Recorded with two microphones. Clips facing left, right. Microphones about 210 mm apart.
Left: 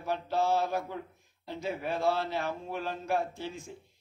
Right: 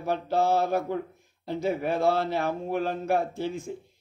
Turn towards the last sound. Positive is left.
turn(degrees=-55)  # may be behind; listen again after turning